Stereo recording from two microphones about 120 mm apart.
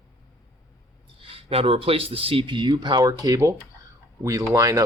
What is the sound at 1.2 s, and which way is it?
Speech, 50° right (ahead or behind).